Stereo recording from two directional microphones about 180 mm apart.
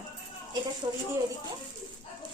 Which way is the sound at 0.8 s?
25° right (ahead or behind).